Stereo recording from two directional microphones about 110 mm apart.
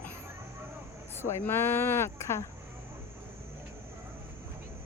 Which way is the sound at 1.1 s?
20° left (ahead or behind).